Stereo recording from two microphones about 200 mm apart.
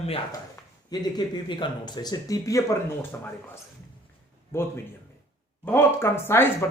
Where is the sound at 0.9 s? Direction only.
20° left (ahead or behind).